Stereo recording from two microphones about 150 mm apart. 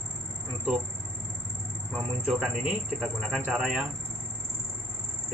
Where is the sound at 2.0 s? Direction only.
5° right (ahead or behind).